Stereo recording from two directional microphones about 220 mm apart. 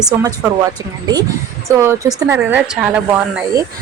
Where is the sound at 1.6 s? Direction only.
10° right (ahead or behind).